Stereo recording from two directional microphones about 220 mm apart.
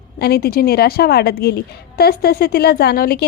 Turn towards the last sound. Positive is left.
turn(degrees=45)  # may be behind; listen again after turning